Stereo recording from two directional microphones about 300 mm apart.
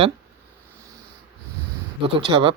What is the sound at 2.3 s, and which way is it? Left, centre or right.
Speech, centre.